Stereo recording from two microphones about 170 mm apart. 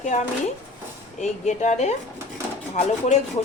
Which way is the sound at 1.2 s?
45° left (ahead or behind).